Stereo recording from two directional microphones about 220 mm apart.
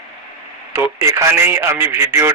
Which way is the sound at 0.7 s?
15° right (ahead or behind).